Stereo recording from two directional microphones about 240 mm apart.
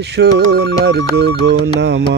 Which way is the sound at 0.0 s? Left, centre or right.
Right.